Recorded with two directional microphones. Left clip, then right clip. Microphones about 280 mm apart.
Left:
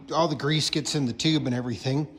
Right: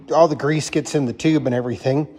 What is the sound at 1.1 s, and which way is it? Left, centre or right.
Speech, centre.